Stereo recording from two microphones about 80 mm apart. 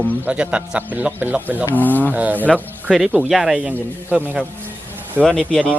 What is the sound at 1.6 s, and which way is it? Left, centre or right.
Speech, left.